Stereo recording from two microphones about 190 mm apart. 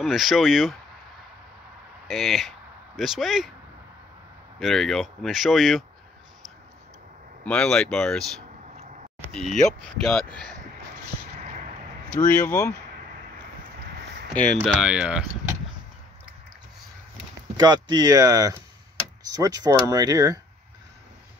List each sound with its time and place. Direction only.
0.0 s speech: centre (ahead or behind)
2.0 s speech: centre (ahead or behind)
4.6 s speech: centre (ahead or behind)
7.4 s speech: 5° left (ahead or behind)
9.3 s speech: centre (ahead or behind)
12.2 s speech: 40° left (ahead or behind)
14.5 s speech: 5° left (ahead or behind)
17.6 s speech: 20° right (ahead or behind)